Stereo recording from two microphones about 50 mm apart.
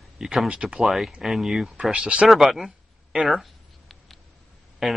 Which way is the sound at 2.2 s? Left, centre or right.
Centre.